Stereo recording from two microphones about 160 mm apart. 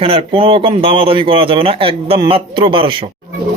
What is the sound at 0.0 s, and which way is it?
Speech, 35° right (ahead or behind).